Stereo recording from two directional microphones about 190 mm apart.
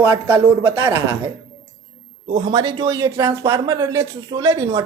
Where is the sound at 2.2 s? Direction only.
20° right (ahead or behind).